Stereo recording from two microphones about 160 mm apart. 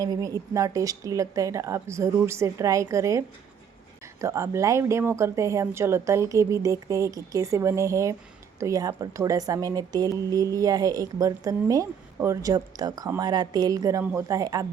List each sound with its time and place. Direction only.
0.0 s speech: 20° right (ahead or behind)
14.0 s speech: 10° right (ahead or behind)
14.3 s speech: 20° right (ahead or behind)